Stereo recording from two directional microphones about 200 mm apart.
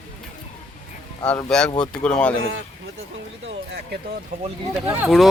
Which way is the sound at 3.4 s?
60° right (ahead or behind).